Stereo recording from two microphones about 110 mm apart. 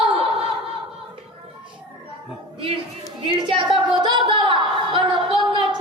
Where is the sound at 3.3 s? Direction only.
45° right (ahead or behind).